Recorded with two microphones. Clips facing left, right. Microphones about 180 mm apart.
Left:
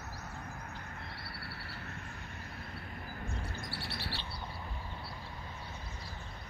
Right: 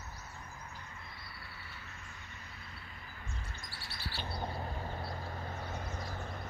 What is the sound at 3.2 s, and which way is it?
Bird, 60° left (ahead or behind).